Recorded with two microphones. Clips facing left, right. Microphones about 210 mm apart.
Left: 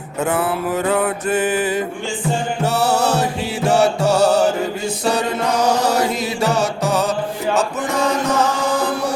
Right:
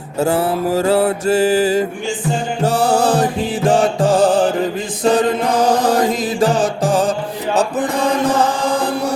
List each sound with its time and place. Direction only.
0.2 s mantra: 30° right (ahead or behind)
2.6 s music: 50° right (ahead or behind)
5.0 s mantra: 50° right (ahead or behind)
8.2 s chant: 30° right (ahead or behind)